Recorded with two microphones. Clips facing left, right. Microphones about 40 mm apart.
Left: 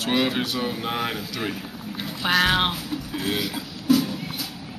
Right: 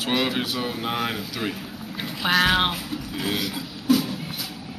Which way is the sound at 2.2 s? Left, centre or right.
Centre.